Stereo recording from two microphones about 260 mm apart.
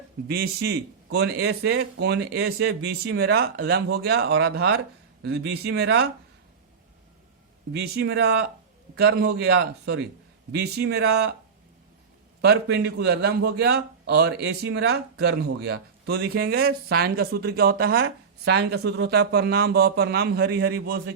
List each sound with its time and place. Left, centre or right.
0.3 s a man's voice: right
7.8 s a man's voice: right
12.5 s a man's voice: right